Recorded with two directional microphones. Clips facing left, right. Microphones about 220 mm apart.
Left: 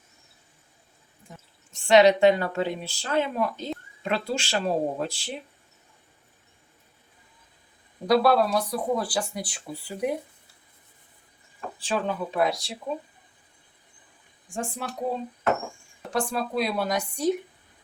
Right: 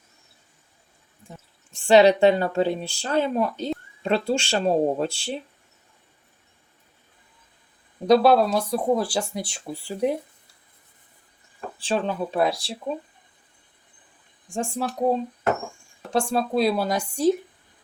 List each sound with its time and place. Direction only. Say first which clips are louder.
1.9 s speech: right 2 dB; 30° right (ahead or behind)
8.0 s speech: right 4 dB; 20° right (ahead or behind)
11.8 s speech: right 3 dB; 30° right (ahead or behind)
14.5 s speech: right 5 dB; 25° right (ahead or behind)
16.1 s speech: right 4 dB; 30° right (ahead or behind)